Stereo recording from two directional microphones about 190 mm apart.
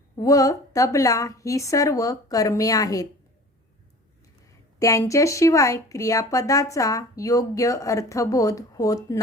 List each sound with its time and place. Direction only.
0.2 s speech: 15° left (ahead or behind)
4.8 s speech: 15° left (ahead or behind)